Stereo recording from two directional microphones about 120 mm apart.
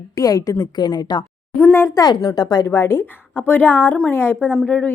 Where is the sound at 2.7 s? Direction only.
25° left (ahead or behind).